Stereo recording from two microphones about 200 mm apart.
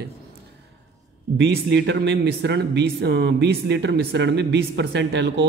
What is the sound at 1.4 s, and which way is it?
Speech, 60° right (ahead or behind).